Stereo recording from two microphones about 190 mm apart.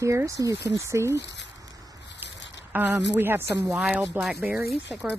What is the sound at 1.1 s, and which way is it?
Speech, 65° left (ahead or behind).